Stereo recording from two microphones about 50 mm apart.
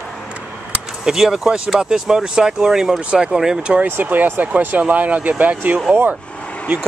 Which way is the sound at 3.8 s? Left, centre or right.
Right.